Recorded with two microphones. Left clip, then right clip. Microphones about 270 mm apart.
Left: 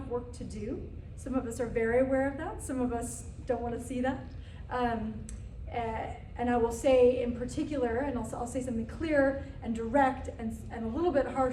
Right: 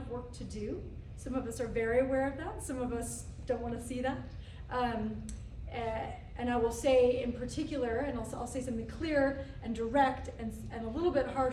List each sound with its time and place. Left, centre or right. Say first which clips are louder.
0.3 s a woman's voice: left 1 dB; centre